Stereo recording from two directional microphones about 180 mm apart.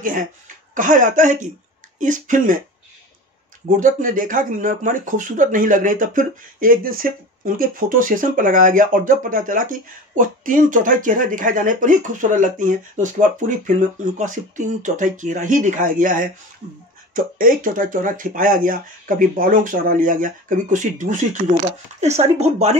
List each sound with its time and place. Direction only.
0.7 s speech: 45° right (ahead or behind)
3.8 s speech: 50° right (ahead or behind)